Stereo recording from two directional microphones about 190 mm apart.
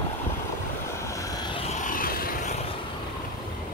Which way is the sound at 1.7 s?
45° left (ahead or behind).